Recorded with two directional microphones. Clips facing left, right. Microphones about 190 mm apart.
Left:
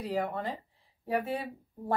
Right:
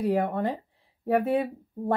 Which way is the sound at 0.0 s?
55° right (ahead or behind).